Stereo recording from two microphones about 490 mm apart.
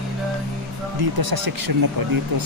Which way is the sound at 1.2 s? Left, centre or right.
Right.